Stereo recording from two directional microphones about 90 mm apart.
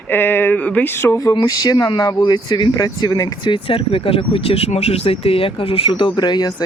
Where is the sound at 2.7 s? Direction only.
45° left (ahead or behind).